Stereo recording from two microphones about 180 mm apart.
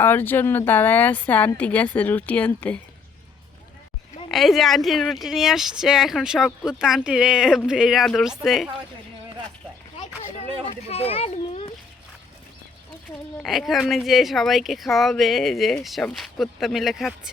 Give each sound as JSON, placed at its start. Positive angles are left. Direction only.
{"t": 0.0, "sound": "speech", "side_deg": 10}
{"t": 4.3, "sound": "speech", "side_deg": 0}
{"t": 10.7, "sound": "a child's voice", "side_deg": 35}
{"t": 13.4, "sound": "speech", "side_deg": 0}